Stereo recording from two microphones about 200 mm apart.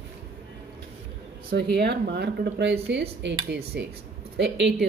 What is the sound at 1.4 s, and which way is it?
Speech, 55° right (ahead or behind).